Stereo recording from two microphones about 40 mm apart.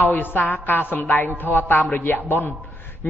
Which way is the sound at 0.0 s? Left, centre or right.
Left.